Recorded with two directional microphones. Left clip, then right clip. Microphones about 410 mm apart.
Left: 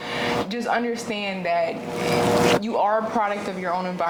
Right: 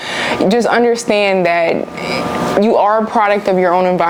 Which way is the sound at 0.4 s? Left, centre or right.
Right.